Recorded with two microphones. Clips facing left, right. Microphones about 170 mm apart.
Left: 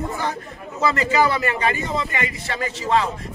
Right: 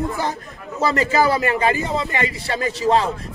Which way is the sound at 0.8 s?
35° right (ahead or behind).